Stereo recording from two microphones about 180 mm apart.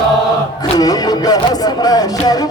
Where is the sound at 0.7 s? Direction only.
20° left (ahead or behind).